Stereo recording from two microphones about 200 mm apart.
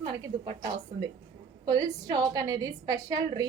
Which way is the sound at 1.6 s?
20° right (ahead or behind).